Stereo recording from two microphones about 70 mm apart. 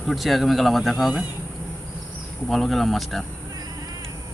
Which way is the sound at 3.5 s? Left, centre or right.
Right.